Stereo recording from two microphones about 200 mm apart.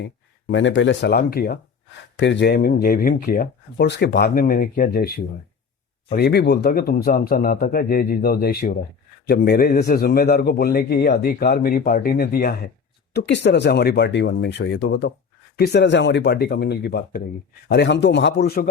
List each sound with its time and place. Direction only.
0.0 s speech: 65° left (ahead or behind); by 1.5 s 50° left (ahead or behind)
2.1 s speech: 65° left (ahead or behind)
6.1 s speech: 55° left (ahead or behind)
13.1 s speech: 60° left (ahead or behind)